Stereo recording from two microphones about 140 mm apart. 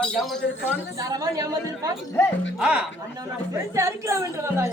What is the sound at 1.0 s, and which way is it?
Speech, 25° right (ahead or behind).